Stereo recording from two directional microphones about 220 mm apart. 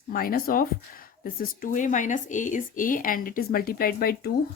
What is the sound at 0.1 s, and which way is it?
A woman's voice, 40° left (ahead or behind).